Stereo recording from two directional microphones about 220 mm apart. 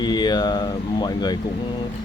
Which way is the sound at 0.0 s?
20° left (ahead or behind).